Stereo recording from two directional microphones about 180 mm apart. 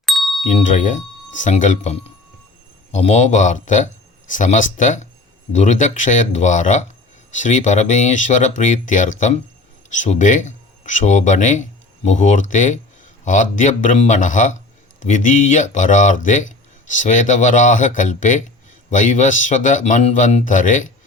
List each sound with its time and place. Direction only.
0.0 s ding: centre (ahead or behind)
0.4 s speech: 45° left (ahead or behind)